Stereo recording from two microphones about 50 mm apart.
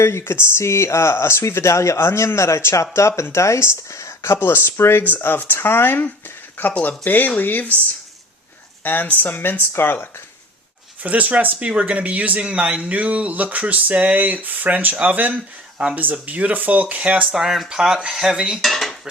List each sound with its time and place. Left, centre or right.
0.0 s speech: left
5.0 s speech: left
8.8 s speech: left
11.0 s speech: right
12.9 s speech: right
17.3 s dishes: centre
18.6 s cutlery: centre